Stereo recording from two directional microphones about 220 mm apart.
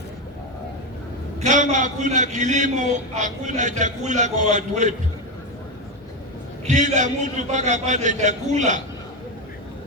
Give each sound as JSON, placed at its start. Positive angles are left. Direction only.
{"t": 1.4, "sound": "a man's voice", "side_deg": -35}
{"t": 6.7, "sound": "a man's voice", "side_deg": -35}